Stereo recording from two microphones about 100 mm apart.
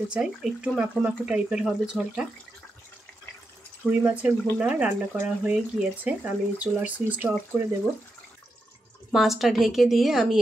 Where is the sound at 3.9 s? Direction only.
15° right (ahead or behind).